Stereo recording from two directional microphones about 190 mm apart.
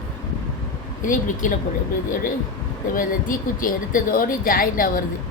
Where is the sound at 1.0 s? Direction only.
45° left (ahead or behind).